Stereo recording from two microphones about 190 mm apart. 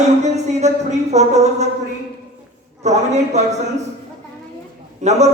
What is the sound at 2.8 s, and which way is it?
Speech, 35° right (ahead or behind).